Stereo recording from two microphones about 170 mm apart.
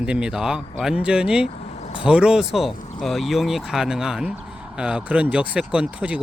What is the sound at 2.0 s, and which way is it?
Speech, 5° right (ahead or behind).